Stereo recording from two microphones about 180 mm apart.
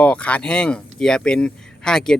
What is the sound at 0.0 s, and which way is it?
Speech, 5° left (ahead or behind).